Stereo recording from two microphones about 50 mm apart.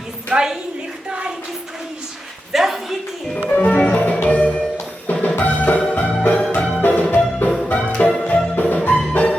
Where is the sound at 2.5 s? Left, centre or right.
Centre.